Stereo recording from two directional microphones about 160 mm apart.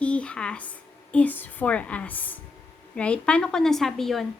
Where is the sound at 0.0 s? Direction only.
5° left (ahead or behind).